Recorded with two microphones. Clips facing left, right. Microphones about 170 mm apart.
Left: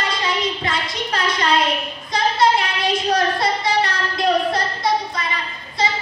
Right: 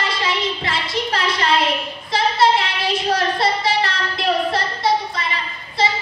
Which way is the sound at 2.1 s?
30° right (ahead or behind).